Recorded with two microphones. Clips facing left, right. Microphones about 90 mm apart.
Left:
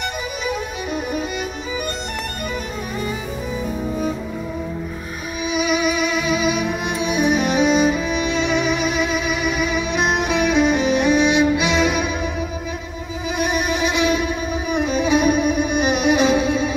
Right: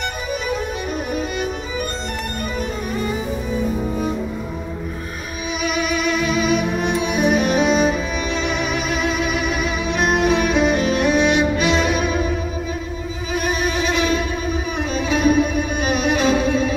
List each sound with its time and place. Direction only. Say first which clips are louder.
5.6 s music: left 2 dB; 5° left (ahead or behind)
8.1 s music: left 2 dB; 40° right (ahead or behind)
8.5 s music: left 2 dB; 5° left (ahead or behind)
13.4 s music: left 1 dB; 10° left (ahead or behind)